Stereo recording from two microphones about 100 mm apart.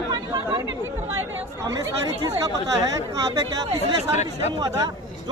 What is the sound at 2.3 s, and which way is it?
Speech, 35° right (ahead or behind).